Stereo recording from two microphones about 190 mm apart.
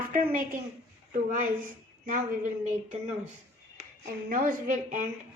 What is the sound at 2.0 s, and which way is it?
Speech, 45° right (ahead or behind).